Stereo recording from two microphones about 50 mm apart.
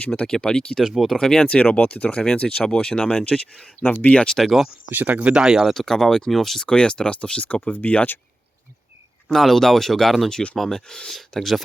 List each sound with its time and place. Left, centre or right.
0.2 s speech: centre
0.9 s speech: centre
1.2 s speech: centre
1.7 s speech: left
2.0 s speech: centre
4.4 s speech: centre
4.9 s speech: right
5.3 s speech: centre
5.7 s speech: centre
6.7 s speech: centre; by 8.1 s left
9.3 s speech: centre